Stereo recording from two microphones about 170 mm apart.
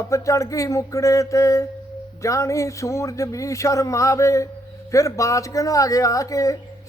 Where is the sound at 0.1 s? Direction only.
20° left (ahead or behind).